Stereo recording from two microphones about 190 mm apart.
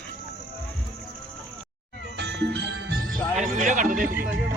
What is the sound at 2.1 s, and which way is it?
Jingle bell, 65° right (ahead or behind).